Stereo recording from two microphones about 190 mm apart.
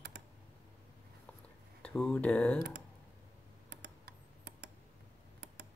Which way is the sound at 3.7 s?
60° right (ahead or behind).